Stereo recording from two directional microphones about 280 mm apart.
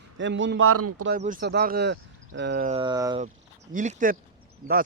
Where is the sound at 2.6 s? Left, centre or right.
Centre.